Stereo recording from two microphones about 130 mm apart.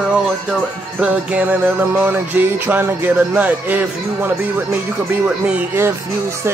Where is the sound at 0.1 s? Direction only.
5° right (ahead or behind).